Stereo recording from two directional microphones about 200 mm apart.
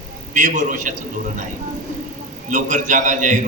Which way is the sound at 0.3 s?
40° right (ahead or behind).